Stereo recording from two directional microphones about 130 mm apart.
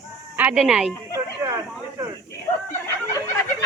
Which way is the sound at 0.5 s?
5° right (ahead or behind).